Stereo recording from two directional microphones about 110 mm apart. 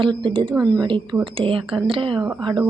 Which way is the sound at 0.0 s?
50° right (ahead or behind).